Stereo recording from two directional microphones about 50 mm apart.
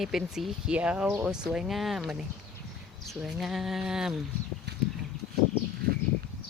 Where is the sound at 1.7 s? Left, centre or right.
Centre.